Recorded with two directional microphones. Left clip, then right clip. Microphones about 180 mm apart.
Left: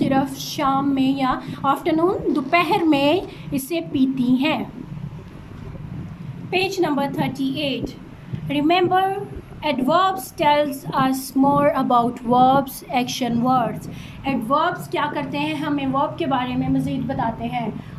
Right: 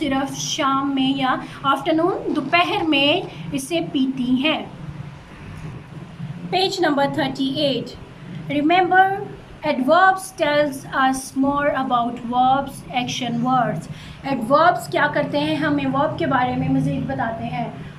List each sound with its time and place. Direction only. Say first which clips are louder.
0.0 s a woman's voice: left 2 dB; 25° left (ahead or behind)
6.5 s a woman's voice: right 2 dB; 15° left (ahead or behind)